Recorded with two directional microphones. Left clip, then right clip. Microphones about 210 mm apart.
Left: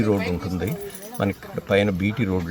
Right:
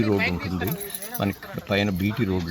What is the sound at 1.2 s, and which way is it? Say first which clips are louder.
Speech: left 3 dB; 5° left (ahead or behind).